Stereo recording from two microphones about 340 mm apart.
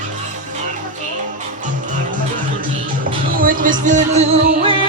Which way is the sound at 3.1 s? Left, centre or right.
Right.